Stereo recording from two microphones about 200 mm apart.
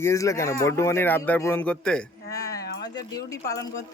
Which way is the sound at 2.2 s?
15° left (ahead or behind).